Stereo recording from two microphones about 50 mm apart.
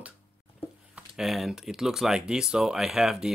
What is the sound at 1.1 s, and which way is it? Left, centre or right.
Speech, centre.